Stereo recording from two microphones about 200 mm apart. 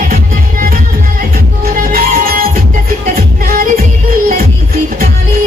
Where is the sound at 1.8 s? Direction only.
45° right (ahead or behind).